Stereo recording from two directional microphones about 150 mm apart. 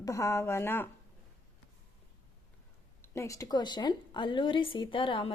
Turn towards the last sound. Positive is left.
turn(degrees=35)  # may be behind; listen again after turning